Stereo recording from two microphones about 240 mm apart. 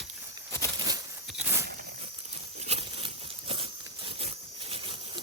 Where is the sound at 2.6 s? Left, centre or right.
Right.